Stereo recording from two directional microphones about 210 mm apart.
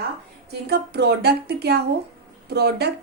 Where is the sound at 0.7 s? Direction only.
50° right (ahead or behind).